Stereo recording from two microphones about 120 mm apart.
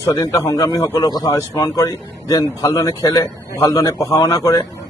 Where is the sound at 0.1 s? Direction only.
30° left (ahead or behind).